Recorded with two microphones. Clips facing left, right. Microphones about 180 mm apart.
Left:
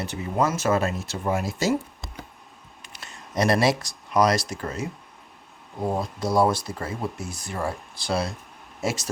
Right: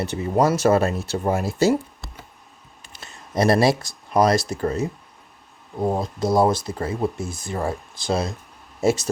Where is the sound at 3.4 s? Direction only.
30° right (ahead or behind).